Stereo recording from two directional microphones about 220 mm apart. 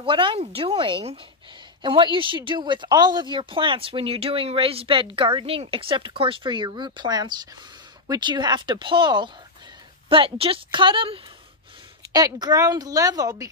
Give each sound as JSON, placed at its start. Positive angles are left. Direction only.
{"t": 0.0, "sound": "a woman's voice", "side_deg": -20}